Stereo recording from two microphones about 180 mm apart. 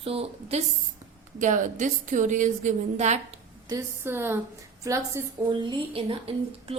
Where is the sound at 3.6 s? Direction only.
15° right (ahead or behind).